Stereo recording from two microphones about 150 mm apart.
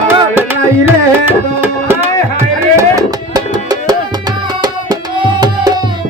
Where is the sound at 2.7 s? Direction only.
25° right (ahead or behind).